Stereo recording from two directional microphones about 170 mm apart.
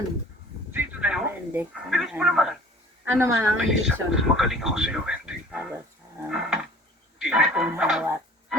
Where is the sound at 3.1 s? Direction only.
15° right (ahead or behind).